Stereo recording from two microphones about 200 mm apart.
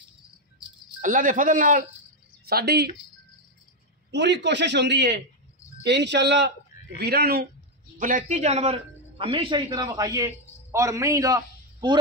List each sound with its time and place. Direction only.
1.0 s speech: 40° right (ahead or behind)
4.1 s a man's voice: 60° right (ahead or behind)
8.0 s a man's voice: 40° right (ahead or behind); by 12.0 s 20° right (ahead or behind)